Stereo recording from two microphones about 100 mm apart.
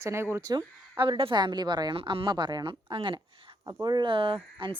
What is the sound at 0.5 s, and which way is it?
A woman's voice, 50° right (ahead or behind).